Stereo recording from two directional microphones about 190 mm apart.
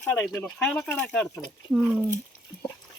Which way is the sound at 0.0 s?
5° left (ahead or behind).